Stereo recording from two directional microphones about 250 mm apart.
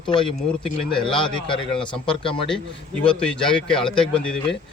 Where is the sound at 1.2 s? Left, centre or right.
Centre.